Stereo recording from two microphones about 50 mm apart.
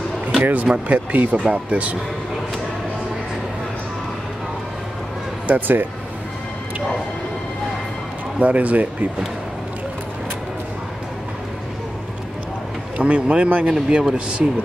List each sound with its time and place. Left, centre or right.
0.4 s speech: right
5.5 s speech: right
8.4 s speech: right
12.9 s speech: right
13.7 s a man's voice: centre